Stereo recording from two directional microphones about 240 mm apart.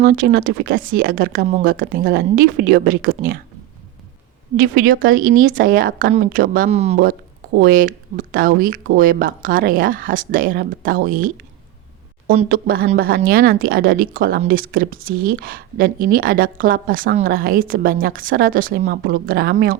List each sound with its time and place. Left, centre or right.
0.0 s speech: right
4.5 s speech: right
12.3 s speech: right